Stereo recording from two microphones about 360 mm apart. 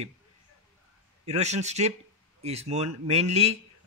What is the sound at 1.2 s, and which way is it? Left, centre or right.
A man's voice, centre.